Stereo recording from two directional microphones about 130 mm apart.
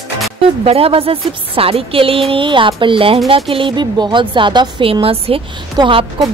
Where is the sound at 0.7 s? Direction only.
45° right (ahead or behind).